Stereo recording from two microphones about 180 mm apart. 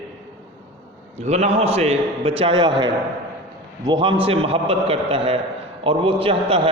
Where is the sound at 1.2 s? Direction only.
40° right (ahead or behind).